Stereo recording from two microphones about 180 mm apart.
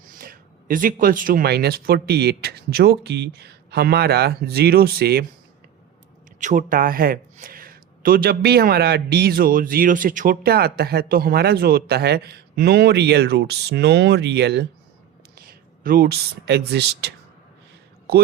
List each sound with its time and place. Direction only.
0.1 s speech: 50° right (ahead or behind)
6.4 s speech: 45° right (ahead or behind); by 14.7 s 70° right (ahead or behind)
15.8 s speech: 55° right (ahead or behind)